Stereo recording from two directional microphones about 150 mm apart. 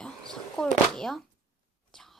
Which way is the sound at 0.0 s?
5° left (ahead or behind).